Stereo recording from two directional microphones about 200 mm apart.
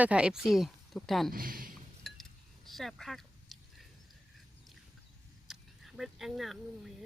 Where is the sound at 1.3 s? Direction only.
45° right (ahead or behind).